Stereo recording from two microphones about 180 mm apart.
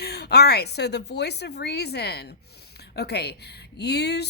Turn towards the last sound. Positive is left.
turn(degrees=65)  # may be behind; listen again after turning